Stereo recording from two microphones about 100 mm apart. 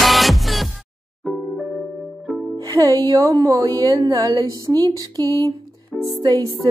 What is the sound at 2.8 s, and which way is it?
A woman's voice, 35° right (ahead or behind).